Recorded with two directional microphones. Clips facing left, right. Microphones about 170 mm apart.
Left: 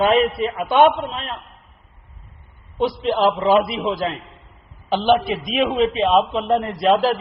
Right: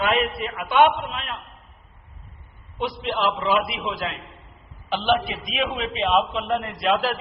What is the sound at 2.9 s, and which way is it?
A man's voice, 35° left (ahead or behind).